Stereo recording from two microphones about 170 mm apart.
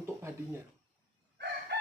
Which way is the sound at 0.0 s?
15° right (ahead or behind).